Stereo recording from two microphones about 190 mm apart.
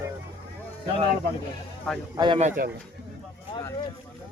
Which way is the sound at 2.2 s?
25° right (ahead or behind).